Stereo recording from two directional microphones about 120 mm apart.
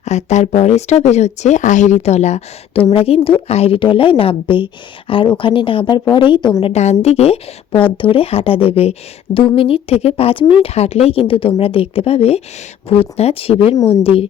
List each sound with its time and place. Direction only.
0.0 s speech: 70° left (ahead or behind)
2.9 s a woman's voice: 55° left (ahead or behind)
6.6 s a woman's voice: 60° left (ahead or behind)